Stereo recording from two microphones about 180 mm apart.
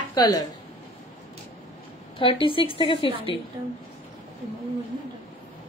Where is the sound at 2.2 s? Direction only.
30° left (ahead or behind).